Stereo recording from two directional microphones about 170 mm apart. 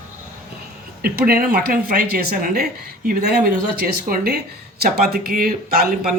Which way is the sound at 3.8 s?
60° right (ahead or behind).